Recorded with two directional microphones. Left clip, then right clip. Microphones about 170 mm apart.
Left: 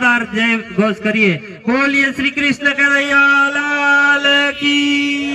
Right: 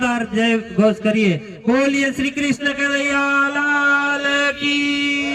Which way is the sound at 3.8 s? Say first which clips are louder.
Left 6 dB; 40° left (ahead or behind).